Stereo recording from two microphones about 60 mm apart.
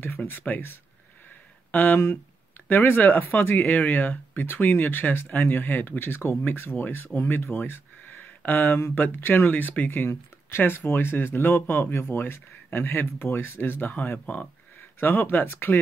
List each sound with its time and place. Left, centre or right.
0.0 s speech: left
14.2 s speech: left
14.8 s speech: left